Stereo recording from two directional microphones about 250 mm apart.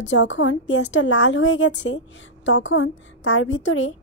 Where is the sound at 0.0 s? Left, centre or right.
Left.